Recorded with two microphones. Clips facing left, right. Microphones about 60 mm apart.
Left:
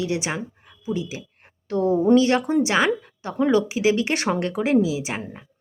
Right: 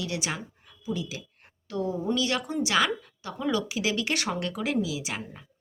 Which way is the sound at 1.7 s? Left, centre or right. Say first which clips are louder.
Left 11 dB; left.